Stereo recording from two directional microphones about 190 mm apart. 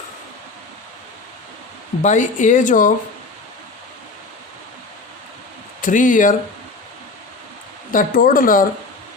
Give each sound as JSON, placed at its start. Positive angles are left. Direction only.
{"t": 2.0, "sound": "speech", "side_deg": 40}
{"t": 5.8, "sound": "a woman's voice", "side_deg": 45}
{"t": 7.9, "sound": "a woman's voice", "side_deg": 45}